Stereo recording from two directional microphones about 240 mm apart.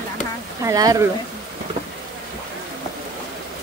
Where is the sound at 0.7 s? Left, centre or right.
Centre.